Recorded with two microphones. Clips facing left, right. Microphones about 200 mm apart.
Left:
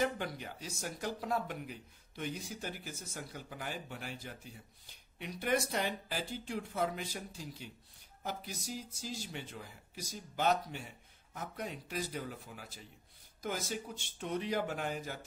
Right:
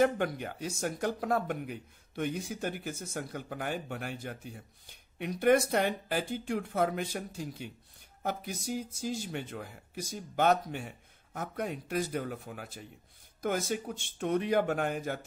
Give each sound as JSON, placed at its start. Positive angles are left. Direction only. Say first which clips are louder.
{"t": 0.0, "sound": "speech", "louder": "right 8 dB", "side_deg": -55}